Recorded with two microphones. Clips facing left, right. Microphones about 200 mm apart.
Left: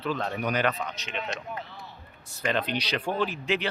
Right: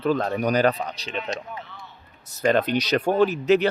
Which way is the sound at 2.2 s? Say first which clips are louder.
Right 8 dB; 40° right (ahead or behind).